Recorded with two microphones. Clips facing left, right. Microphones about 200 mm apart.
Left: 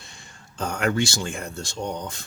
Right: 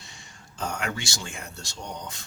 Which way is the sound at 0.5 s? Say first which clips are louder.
Left 7 dB; 55° left (ahead or behind).